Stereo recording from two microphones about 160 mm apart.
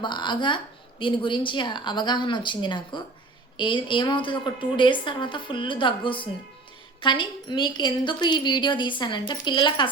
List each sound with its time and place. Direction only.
0.0 s a woman's voice: 30° left (ahead or behind)